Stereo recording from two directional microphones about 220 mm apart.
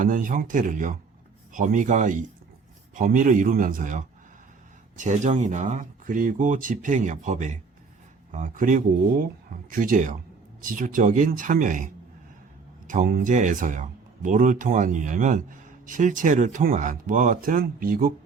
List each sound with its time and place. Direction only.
0.0 s speech: 35° right (ahead or behind)
12.9 s speech: 40° right (ahead or behind)